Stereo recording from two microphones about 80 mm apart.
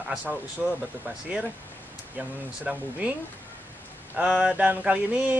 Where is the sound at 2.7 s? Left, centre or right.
Centre.